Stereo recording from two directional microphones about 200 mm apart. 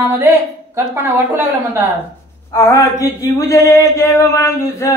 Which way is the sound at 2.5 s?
15° left (ahead or behind).